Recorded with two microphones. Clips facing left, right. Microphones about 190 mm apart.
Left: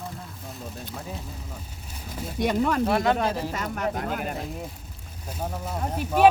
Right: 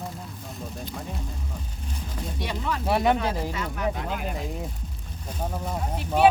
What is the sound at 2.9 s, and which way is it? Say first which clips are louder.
Speech: right 6 dB; 15° right (ahead or behind).